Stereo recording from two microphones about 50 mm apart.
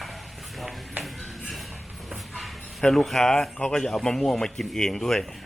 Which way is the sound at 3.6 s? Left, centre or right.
Centre.